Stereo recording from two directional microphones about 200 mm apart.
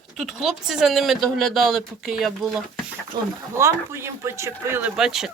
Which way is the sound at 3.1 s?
20° right (ahead or behind).